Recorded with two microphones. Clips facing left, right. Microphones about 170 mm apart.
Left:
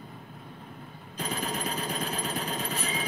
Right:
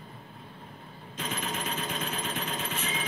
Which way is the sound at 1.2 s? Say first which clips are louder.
Left 2 dB; 35° left (ahead or behind).